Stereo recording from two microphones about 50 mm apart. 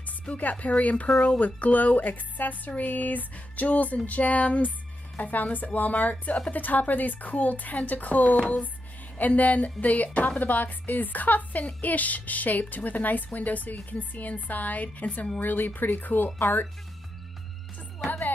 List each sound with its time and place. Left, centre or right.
0.4 s a woman's voice: left
1.4 s music: left